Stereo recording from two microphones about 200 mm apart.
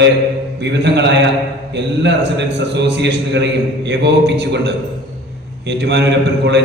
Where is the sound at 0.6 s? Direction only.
60° right (ahead or behind).